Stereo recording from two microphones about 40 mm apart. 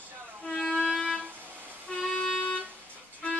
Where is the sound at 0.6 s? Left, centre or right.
Left.